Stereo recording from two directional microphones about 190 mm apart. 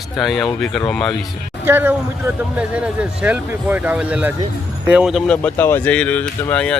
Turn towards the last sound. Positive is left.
turn(degrees=5)  # may be behind; listen again after turning